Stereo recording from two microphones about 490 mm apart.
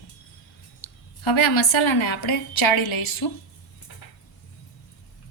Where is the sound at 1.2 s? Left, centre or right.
Left.